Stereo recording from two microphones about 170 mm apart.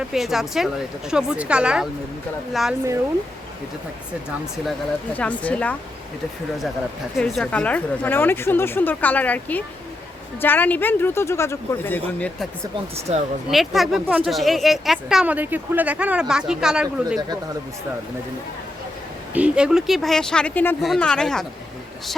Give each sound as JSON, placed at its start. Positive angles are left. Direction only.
{"t": 0.1, "sound": "a woman's voice", "side_deg": 0}
{"t": 5.1, "sound": "a woman's voice", "side_deg": 10}
{"t": 7.2, "sound": "a woman's voice", "side_deg": 5}
{"t": 13.1, "sound": "speech", "side_deg": -40}
{"t": 13.5, "sound": "a woman's voice", "side_deg": 0}
{"t": 19.3, "sound": "a woman's voice", "side_deg": -5}